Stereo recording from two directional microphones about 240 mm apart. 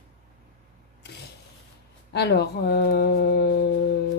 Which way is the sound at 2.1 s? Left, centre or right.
Left.